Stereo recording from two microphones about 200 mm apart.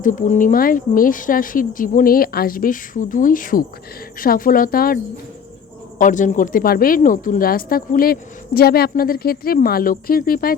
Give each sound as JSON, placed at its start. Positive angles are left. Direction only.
{"t": 0.0, "sound": "a woman's voice", "side_deg": 40}
{"t": 6.0, "sound": "a woman's voice", "side_deg": 40}